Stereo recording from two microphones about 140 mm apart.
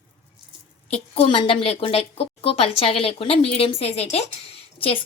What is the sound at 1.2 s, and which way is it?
A woman's voice, 40° left (ahead or behind).